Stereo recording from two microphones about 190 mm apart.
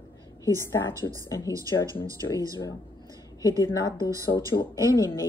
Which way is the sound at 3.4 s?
20° left (ahead or behind).